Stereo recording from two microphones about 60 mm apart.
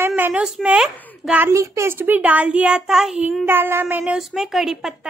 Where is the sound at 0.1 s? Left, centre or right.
Right.